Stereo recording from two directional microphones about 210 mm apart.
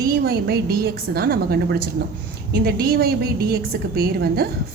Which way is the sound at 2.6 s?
45° right (ahead or behind).